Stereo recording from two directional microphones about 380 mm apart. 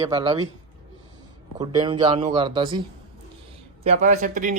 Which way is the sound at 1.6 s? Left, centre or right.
Centre.